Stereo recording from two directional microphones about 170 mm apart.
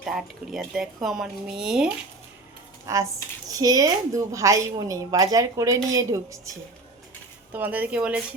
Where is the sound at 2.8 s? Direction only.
20° right (ahead or behind).